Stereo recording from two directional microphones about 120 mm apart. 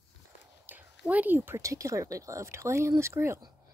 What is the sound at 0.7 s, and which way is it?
Speech, 15° right (ahead or behind).